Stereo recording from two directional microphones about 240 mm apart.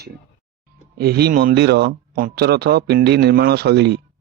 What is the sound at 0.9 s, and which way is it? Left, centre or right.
Speech, right.